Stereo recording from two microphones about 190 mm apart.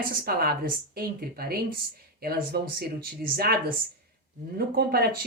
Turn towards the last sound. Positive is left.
turn(degrees=-55)  # may be behind; listen again after turning